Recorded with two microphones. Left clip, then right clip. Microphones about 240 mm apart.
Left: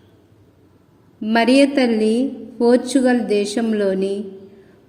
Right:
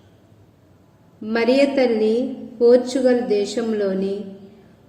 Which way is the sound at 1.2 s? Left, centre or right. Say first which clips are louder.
Left 3 dB; left.